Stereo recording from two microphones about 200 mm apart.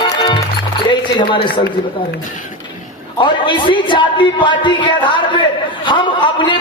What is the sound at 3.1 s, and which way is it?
A man's voice, 25° left (ahead or behind).